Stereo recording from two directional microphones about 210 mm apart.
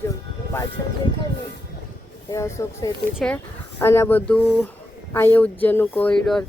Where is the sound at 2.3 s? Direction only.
15° left (ahead or behind).